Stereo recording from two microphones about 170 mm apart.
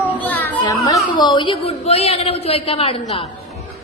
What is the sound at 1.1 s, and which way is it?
A woman's voice, 25° left (ahead or behind).